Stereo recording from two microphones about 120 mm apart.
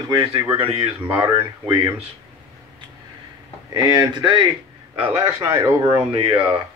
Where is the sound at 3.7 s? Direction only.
35° right (ahead or behind).